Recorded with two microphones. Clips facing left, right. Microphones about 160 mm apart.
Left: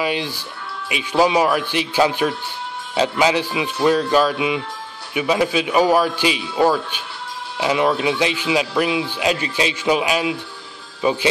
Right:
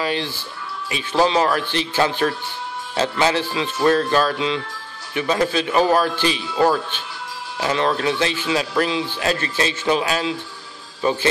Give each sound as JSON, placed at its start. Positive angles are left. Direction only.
{"t": 0.0, "sound": "speech", "side_deg": 15}